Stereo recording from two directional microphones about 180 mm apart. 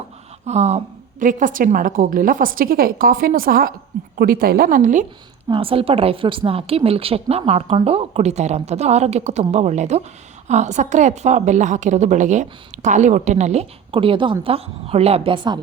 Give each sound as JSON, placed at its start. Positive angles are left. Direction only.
{"t": 0.4, "sound": "a woman's voice", "side_deg": -40}
{"t": 5.5, "sound": "a woman's voice", "side_deg": -30}